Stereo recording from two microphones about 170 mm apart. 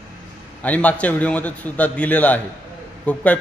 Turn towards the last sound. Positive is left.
turn(degrees=5)  # may be behind; listen again after turning